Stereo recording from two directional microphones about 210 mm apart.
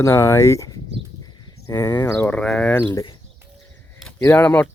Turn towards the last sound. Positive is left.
turn(degrees=5)  # may be behind; listen again after turning